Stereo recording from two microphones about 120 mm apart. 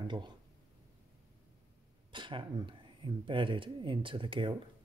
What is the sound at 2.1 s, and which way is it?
Speech, 40° right (ahead or behind).